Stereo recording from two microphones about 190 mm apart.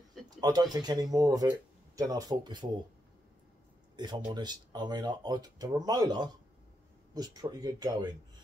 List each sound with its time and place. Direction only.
0.4 s speech: 20° right (ahead or behind)
3.9 s speech: 25° right (ahead or behind)